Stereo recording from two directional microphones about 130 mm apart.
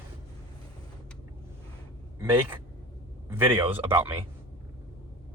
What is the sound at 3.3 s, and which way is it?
Speech, 15° right (ahead or behind).